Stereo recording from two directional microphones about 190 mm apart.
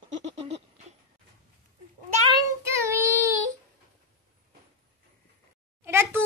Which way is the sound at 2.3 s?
15° right (ahead or behind).